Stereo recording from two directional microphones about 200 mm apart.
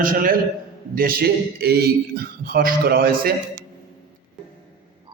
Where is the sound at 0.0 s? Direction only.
45° right (ahead or behind).